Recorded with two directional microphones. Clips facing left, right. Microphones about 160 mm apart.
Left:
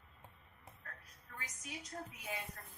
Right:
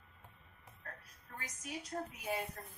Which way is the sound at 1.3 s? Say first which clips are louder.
Right 2 dB; 35° right (ahead or behind).